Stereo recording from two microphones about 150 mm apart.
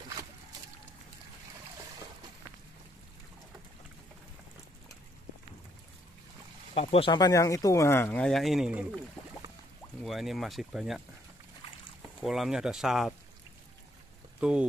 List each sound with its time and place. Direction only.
6.7 s speech: 40° left (ahead or behind)
7.1 s speech: 25° left (ahead or behind); by 9.0 s 5° right (ahead or behind)
10.0 s speech: centre (ahead or behind)
12.2 s speech: centre (ahead or behind)